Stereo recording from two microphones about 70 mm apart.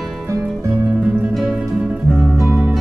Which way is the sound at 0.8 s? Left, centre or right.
Centre.